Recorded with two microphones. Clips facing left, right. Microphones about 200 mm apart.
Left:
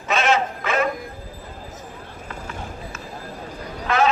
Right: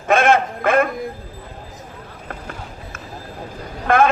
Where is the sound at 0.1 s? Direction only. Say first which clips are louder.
Right 5 dB; 55° right (ahead or behind).